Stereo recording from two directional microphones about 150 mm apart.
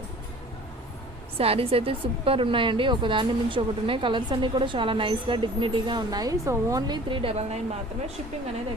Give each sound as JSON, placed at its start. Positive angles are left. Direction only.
{"t": 1.4, "sound": "a woman's voice", "side_deg": -40}